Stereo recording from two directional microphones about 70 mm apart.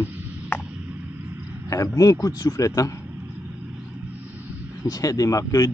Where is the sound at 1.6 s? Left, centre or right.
Left.